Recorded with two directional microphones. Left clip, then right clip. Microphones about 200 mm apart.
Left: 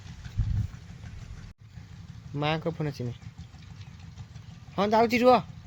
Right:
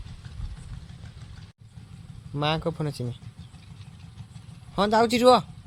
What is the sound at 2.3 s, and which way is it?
Speech, 15° right (ahead or behind).